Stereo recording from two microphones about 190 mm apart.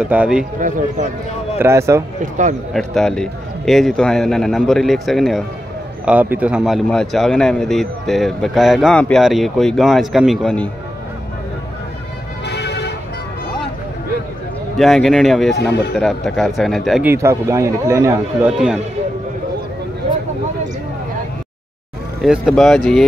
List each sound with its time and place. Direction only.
0.0 s speech: 5° right (ahead or behind)
0.6 s speech: 45° right (ahead or behind)
1.6 s speech: 15° right (ahead or behind)
2.7 s speech: centre (ahead or behind)
12.4 s vehicle: 60° left (ahead or behind)
14.8 s speech: centre (ahead or behind)
17.1 s speech: 15° right (ahead or behind)
22.2 s speech: centre (ahead or behind)